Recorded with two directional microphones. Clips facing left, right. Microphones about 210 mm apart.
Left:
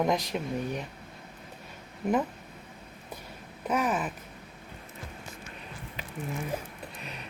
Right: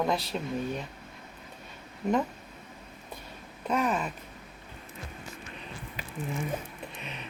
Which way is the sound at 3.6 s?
5° left (ahead or behind).